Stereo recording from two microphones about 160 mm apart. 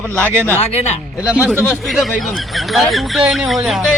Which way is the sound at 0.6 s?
45° left (ahead or behind).